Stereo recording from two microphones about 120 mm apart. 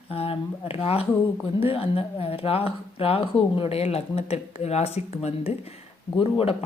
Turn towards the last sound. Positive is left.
turn(degrees=55)  # may be behind; listen again after turning